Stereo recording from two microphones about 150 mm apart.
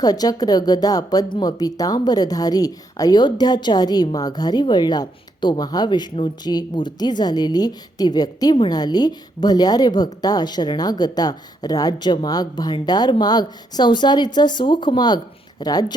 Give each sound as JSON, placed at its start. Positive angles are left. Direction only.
{"t": 0.0, "sound": "speech", "side_deg": 25}